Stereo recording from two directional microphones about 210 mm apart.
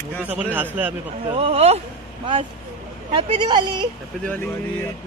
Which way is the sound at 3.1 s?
25° right (ahead or behind).